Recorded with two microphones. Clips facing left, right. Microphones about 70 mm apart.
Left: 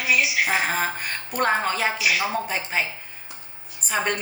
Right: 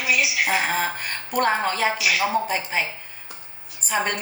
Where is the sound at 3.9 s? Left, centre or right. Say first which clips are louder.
Even; centre.